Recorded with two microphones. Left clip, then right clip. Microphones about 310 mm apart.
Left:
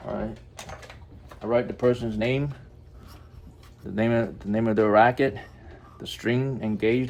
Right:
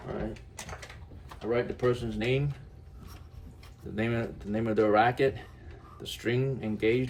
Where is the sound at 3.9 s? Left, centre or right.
Left.